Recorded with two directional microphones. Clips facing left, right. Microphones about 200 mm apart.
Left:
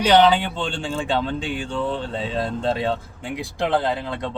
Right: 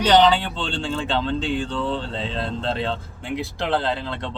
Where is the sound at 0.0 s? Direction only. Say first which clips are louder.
Left 1 dB; 10° left (ahead or behind).